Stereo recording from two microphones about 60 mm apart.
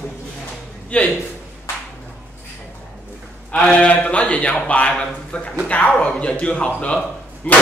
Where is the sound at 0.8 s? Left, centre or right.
Left.